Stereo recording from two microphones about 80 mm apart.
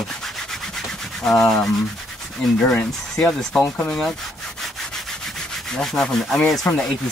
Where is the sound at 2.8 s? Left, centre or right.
Centre.